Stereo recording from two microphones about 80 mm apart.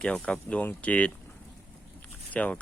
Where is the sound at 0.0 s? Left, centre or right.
Centre.